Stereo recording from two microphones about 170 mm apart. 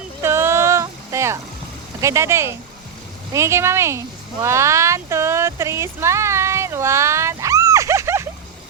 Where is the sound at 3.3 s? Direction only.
15° right (ahead or behind).